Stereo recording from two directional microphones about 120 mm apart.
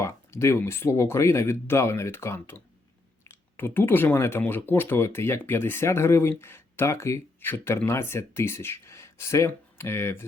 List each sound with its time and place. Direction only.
0.0 s speech: 20° left (ahead or behind)